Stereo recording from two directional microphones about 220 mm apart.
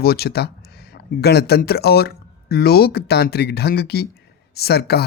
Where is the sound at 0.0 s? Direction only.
45° left (ahead or behind).